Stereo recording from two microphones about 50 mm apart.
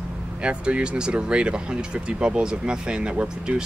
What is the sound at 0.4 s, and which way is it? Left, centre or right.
Speech, right.